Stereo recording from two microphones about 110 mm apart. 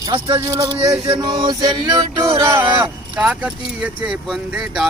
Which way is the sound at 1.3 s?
45° right (ahead or behind).